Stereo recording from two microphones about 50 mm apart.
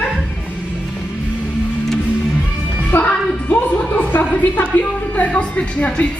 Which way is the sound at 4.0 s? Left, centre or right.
Left.